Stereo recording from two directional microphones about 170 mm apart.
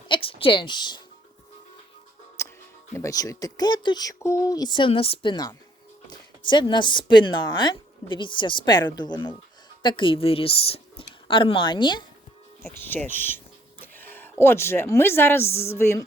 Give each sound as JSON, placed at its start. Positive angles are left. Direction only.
{"t": 0.1, "sound": "a sound", "side_deg": 30}
{"t": 2.4, "sound": "music", "side_deg": 15}
{"t": 2.9, "sound": "speech", "side_deg": 20}
{"t": 12.6, "sound": "speech", "side_deg": 10}